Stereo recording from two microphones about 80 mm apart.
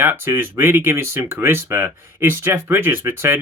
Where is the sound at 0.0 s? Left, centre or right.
Right.